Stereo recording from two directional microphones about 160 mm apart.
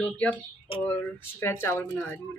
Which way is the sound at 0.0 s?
10° left (ahead or behind).